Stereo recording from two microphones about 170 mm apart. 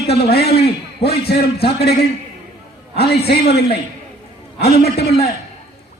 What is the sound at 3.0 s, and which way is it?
Speech, 70° left (ahead or behind).